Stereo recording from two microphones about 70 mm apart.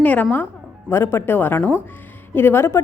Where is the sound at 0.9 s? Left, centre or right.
Left.